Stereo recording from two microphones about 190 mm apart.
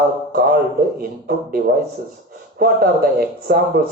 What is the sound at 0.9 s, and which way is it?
Speech, 50° right (ahead or behind).